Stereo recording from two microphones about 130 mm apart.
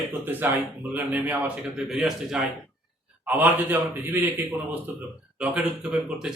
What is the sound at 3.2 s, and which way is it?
A man's voice, 15° right (ahead or behind).